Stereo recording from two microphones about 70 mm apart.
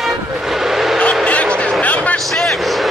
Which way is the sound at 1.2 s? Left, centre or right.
Centre.